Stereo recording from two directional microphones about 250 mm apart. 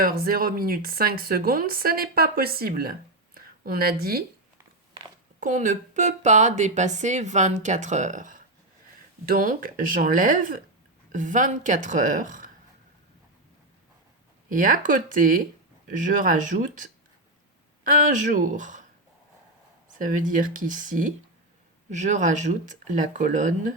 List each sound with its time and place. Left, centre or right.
0.0 s speech: right
5.4 s speech: right
14.5 s speech: right
19.9 s speech: right